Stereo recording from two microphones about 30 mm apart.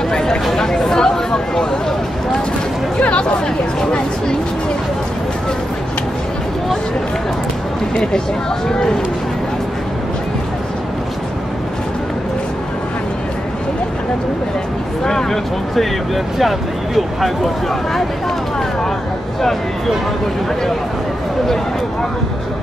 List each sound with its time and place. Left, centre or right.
0.1 s a sound: left
0.6 s speech: centre
3.0 s speech: left
8.6 s speech: centre
15.0 s speech: centre
16.3 s speech: centre